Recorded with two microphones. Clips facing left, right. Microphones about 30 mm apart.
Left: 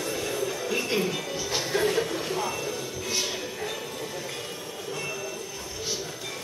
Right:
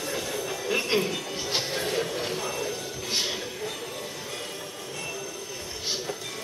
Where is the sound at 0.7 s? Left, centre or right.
Right.